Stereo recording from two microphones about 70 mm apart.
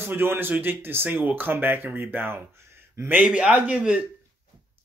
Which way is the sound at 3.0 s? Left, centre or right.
Right.